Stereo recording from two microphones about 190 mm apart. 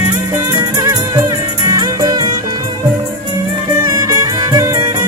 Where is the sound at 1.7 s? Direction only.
20° right (ahead or behind).